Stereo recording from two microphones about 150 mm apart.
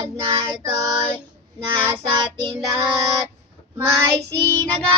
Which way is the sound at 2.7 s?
20° right (ahead or behind).